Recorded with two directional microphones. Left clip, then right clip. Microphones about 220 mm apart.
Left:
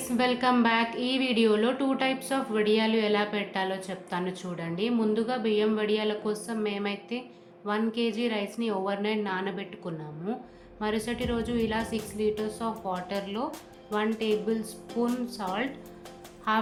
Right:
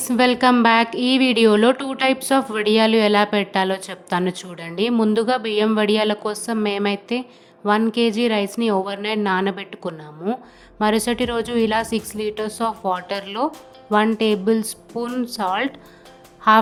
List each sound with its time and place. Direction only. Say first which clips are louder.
0.0 s a woman's voice: right 10 dB; 50° right (ahead or behind)